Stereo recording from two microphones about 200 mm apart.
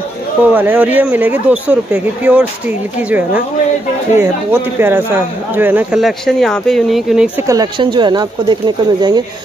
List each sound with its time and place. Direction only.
0.5 s speech: 10° right (ahead or behind)
7.4 s speech: 20° right (ahead or behind)